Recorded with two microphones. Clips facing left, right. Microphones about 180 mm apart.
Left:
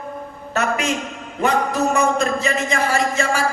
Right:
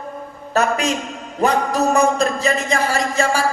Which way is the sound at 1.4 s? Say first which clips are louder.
Right 2 dB; 35° right (ahead or behind).